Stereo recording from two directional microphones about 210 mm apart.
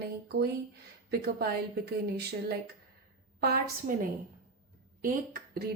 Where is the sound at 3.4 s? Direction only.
45° right (ahead or behind).